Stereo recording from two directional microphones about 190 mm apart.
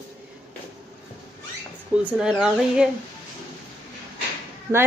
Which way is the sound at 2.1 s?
5° right (ahead or behind).